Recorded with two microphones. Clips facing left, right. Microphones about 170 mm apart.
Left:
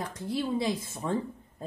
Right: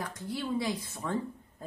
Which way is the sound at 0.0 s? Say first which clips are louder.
Left 4 dB; 25° left (ahead or behind).